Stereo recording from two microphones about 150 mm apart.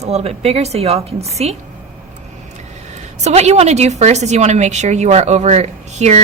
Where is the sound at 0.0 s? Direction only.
45° right (ahead or behind).